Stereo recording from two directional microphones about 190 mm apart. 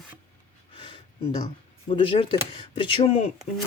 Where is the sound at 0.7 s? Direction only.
25° left (ahead or behind).